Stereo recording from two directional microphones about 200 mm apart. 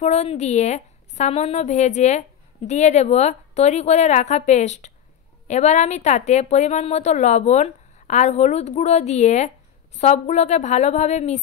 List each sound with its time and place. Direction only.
0.0 s a woman's voice: 35° left (ahead or behind)